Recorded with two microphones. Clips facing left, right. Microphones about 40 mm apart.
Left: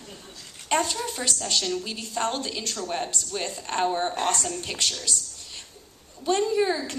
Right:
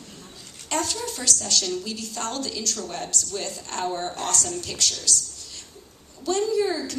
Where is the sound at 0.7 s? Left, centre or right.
Left.